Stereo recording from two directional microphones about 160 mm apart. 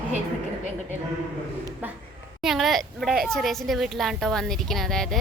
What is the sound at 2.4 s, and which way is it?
A woman's voice, centre (ahead or behind).